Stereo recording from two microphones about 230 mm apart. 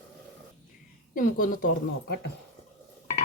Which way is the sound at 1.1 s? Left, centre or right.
Left.